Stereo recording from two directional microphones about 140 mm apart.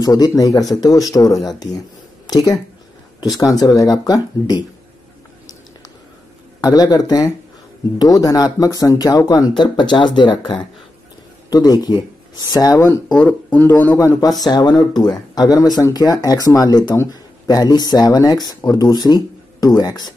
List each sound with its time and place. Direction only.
0.0 s speech: 25° left (ahead or behind)
6.6 s speech: 25° left (ahead or behind); by 13.9 s 10° left (ahead or behind)
13.9 s speech: 25° left (ahead or behind)